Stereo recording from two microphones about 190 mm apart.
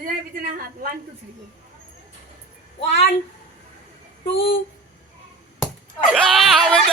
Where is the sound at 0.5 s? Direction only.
45° right (ahead or behind).